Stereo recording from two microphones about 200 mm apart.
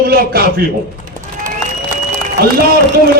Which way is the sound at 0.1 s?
50° right (ahead or behind).